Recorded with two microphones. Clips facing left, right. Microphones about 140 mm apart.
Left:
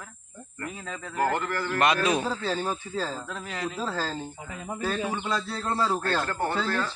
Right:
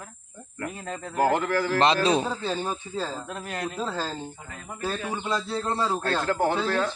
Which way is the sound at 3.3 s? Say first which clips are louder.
Right 1 dB; 50° right (ahead or behind).